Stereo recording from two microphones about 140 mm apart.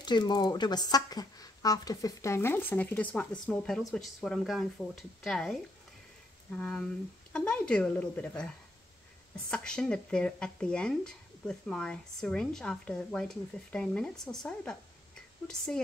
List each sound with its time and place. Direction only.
0.0 s speech: 30° left (ahead or behind); by 5.6 s centre (ahead or behind)
7.3 s a woman's voice: 10° left (ahead or behind)
9.5 s speech: 5° left (ahead or behind)